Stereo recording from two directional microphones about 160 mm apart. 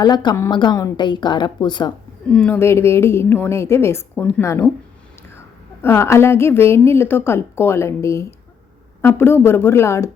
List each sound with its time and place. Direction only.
0.0 s speech: 25° left (ahead or behind)
2.3 s a woman's voice: 10° left (ahead or behind)
5.8 s a woman's voice: 15° left (ahead or behind)